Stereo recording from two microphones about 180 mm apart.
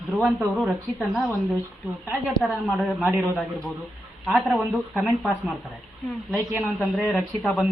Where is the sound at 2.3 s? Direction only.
Centre (ahead or behind).